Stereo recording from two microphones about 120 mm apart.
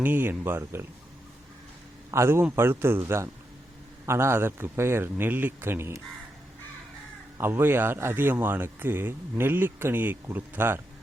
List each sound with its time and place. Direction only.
0.0 s speech: 15° right (ahead or behind)
2.0 s speech: 20° right (ahead or behind)
7.3 s speech: 15° right (ahead or behind)